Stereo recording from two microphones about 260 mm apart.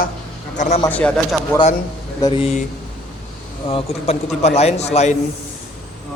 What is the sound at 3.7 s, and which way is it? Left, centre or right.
A man's voice, left.